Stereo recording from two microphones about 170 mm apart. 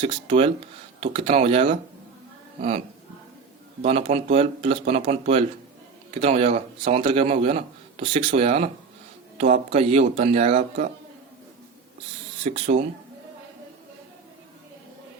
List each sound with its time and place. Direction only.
0.0 s speech: 35° right (ahead or behind)
3.8 s speech: 35° right (ahead or behind)
12.4 s speech: 40° right (ahead or behind)